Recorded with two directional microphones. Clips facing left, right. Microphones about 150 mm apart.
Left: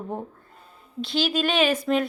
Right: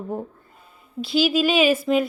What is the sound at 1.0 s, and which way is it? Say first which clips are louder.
A woman's voice: right 5 dB; 5° right (ahead or behind).